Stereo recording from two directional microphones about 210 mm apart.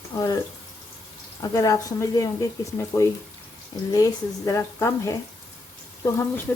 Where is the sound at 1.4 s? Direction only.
15° left (ahead or behind).